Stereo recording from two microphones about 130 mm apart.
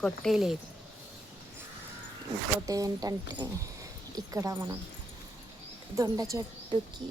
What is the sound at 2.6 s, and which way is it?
Speech, 30° right (ahead or behind).